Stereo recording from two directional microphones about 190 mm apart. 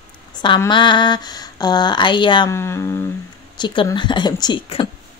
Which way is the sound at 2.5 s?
15° left (ahead or behind).